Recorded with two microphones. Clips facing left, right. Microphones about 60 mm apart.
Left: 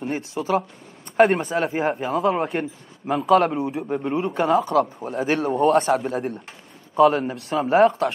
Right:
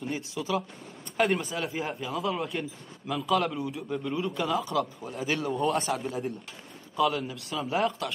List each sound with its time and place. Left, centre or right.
0.0 s speech: left
3.8 s speech: left
5.9 s speech: left
7.0 s speech: left